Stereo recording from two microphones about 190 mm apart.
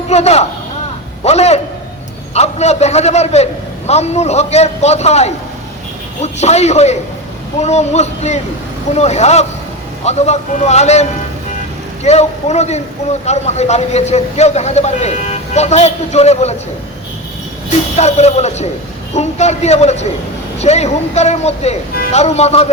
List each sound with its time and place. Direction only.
0.1 s a man's voice: 35° left (ahead or behind)
12.0 s a man's voice: 35° left (ahead or behind)
17.9 s a man's voice: 35° left (ahead or behind)